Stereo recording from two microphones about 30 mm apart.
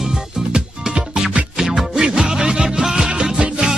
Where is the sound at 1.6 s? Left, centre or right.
Centre.